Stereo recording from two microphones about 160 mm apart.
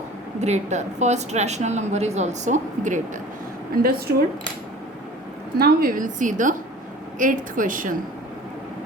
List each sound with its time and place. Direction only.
0.3 s speech: 45° right (ahead or behind)
5.5 s a woman's voice: 70° right (ahead or behind)